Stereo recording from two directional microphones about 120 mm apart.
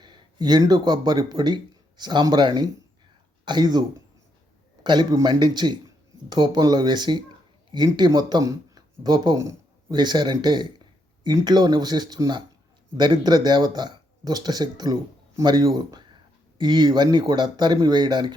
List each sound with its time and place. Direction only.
0.0 s speech: 35° right (ahead or behind)